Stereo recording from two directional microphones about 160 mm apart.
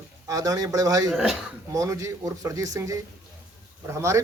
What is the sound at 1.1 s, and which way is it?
Speech, centre (ahead or behind).